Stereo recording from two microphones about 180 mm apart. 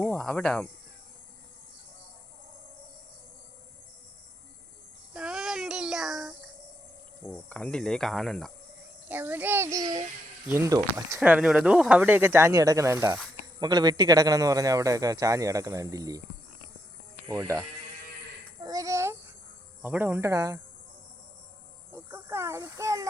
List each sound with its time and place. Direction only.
0.1 s speech: 5° left (ahead or behind)
5.1 s child singing: 5° right (ahead or behind)
7.3 s speech: 5° left (ahead or behind)
9.0 s speech: 10° right (ahead or behind)
17.2 s speech: 15° right (ahead or behind)
18.6 s a sound: 20° right (ahead or behind)
19.8 s speech: 10° right (ahead or behind)
21.9 s a sound: 15° right (ahead or behind)